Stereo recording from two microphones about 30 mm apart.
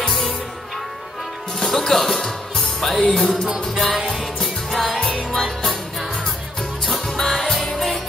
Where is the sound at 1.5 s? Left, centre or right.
Centre.